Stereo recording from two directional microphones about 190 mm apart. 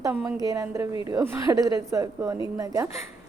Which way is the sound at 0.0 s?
15° right (ahead or behind).